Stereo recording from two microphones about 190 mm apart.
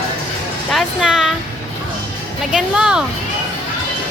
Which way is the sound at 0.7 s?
Centre (ahead or behind).